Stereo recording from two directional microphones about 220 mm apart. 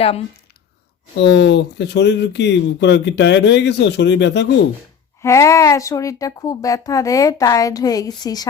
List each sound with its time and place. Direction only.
1.1 s speech: 50° left (ahead or behind)
5.2 s speech: 15° left (ahead or behind)